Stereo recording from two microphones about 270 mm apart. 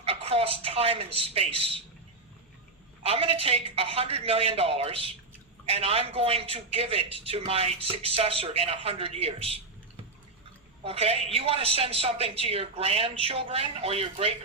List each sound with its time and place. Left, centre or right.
0.0 s a man's voice: right
3.0 s speech: right
10.8 s speech: right